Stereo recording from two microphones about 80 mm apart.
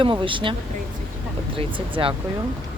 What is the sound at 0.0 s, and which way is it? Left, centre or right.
Speech, right.